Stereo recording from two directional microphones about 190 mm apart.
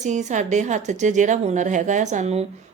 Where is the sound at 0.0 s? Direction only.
40° right (ahead or behind).